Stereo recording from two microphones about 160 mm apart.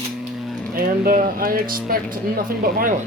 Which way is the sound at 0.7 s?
65° right (ahead or behind).